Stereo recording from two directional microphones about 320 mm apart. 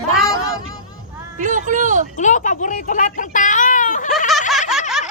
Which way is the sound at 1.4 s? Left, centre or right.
Right.